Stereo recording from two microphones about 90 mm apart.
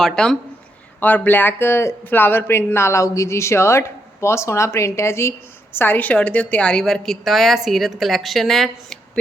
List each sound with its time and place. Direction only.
0.0 s speech: 5° left (ahead or behind)
0.9 s a woman's voice: 20° left (ahead or behind); by 9.0 s centre (ahead or behind)